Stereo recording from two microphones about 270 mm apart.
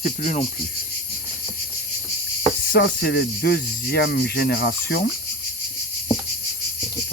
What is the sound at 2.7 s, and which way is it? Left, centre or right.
Speech, left.